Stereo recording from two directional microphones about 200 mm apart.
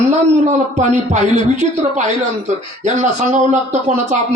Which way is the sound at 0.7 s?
35° right (ahead or behind).